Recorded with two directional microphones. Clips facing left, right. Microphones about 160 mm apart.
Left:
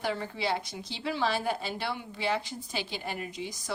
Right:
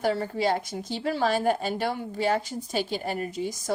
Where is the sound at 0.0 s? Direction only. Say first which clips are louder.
Right 7 dB; 40° right (ahead or behind).